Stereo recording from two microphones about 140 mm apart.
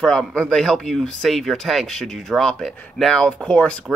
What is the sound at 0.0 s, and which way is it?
Speech, 5° left (ahead or behind).